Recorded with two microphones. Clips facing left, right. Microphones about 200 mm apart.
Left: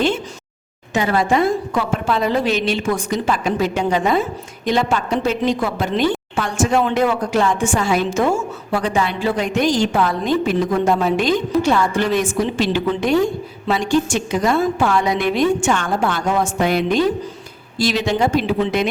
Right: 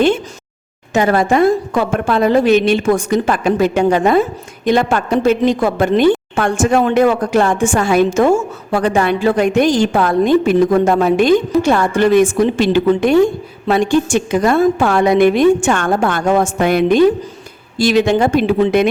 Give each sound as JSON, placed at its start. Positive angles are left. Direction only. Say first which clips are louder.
{"t": 0.9, "sound": "a woman's voice", "louder": "right 4 dB", "side_deg": -50}